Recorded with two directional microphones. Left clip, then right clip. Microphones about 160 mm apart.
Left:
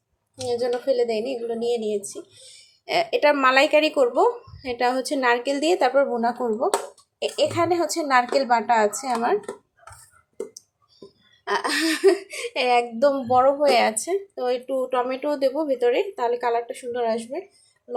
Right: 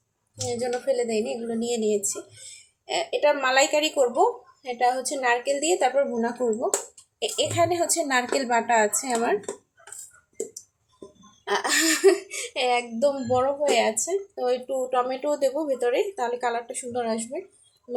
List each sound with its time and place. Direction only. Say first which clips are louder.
0.4 s a woman's voice: left 3 dB; 10° left (ahead or behind)
2.8 s a woman's voice: left 3 dB; 15° left (ahead or behind)
11.4 s a woman's voice: even; 10° left (ahead or behind)